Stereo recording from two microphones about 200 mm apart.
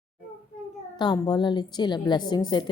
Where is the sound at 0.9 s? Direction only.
20° left (ahead or behind).